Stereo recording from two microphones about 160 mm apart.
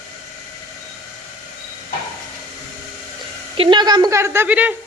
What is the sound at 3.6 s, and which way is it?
A woman's voice, 30° right (ahead or behind).